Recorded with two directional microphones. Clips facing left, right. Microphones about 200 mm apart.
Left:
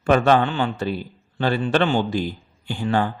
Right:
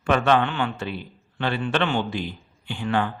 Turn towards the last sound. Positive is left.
turn(degrees=40)  # may be behind; listen again after turning